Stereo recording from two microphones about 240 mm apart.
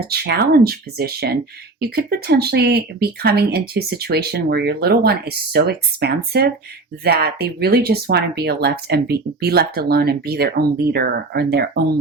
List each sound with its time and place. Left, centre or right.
0.0 s speech: right